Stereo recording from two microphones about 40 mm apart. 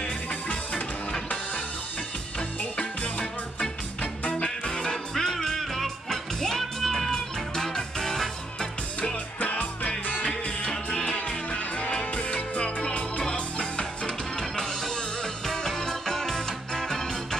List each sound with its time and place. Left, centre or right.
0.0 s music: left
2.8 s music: left
5.1 s music: centre
9.4 s music: left
10.7 s music: centre
13.2 s music: centre